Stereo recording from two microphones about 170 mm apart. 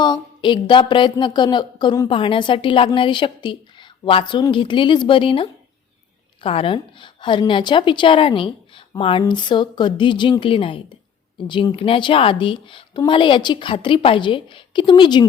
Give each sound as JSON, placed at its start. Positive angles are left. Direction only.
{"t": 0.0, "sound": "speech", "side_deg": 25}